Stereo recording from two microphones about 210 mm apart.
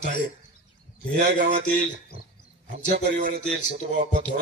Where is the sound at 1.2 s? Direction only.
40° right (ahead or behind).